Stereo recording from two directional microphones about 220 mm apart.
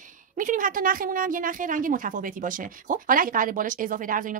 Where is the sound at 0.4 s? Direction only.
35° right (ahead or behind).